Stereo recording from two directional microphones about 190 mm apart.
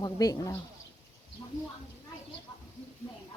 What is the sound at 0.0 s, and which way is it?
Speech, 20° left (ahead or behind).